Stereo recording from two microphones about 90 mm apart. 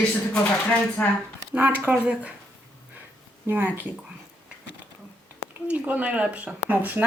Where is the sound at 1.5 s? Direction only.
20° right (ahead or behind).